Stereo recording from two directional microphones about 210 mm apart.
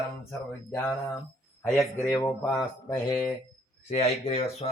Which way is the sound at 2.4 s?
5° left (ahead or behind).